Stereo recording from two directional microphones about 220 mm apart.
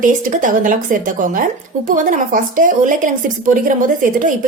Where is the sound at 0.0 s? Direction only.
35° right (ahead or behind).